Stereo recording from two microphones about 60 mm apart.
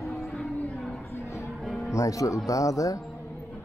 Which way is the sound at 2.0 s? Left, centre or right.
Left.